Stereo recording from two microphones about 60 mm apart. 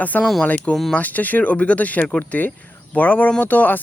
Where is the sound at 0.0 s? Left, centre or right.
Left.